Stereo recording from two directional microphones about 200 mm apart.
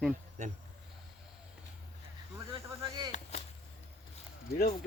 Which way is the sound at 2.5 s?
20° right (ahead or behind).